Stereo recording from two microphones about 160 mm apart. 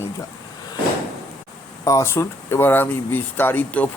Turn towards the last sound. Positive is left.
turn(degrees=10)  # may be behind; listen again after turning